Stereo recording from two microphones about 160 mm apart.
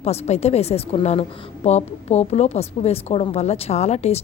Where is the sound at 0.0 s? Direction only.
40° left (ahead or behind).